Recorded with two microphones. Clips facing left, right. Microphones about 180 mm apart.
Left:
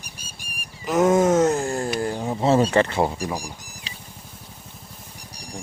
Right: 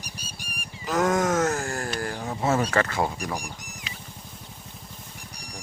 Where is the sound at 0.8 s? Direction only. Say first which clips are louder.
Left 6 dB; 20° left (ahead or behind).